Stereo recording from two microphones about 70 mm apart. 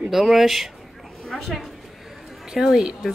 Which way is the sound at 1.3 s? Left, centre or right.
Centre.